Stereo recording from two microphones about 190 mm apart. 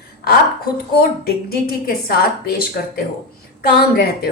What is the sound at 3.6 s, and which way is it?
Speech, 55° left (ahead or behind).